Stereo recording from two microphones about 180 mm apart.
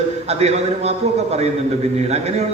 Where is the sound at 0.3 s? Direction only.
35° right (ahead or behind).